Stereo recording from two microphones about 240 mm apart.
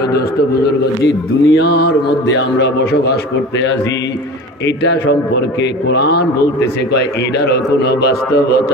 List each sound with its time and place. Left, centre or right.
1.0 s speech: left